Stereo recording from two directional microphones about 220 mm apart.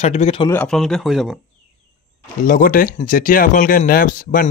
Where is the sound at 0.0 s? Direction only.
30° left (ahead or behind).